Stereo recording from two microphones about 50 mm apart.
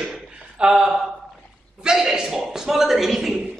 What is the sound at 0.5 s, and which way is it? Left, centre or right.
Speech, centre.